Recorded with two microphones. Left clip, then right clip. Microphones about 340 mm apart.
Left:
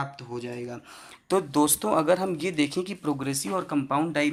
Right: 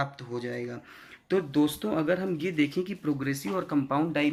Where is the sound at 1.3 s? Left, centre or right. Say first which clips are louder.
Left 3 dB; centre.